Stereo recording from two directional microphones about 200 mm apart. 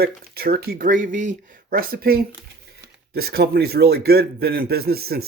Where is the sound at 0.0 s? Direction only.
50° right (ahead or behind).